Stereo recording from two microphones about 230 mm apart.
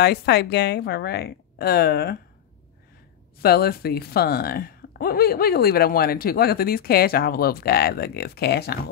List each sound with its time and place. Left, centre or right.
0.0 s a woman's voice: left
3.4 s speech: left